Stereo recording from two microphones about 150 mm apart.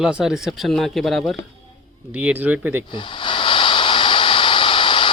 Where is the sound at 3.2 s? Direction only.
35° left (ahead or behind).